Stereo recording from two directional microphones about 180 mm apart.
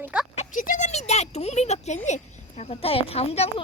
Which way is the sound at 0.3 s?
45° left (ahead or behind).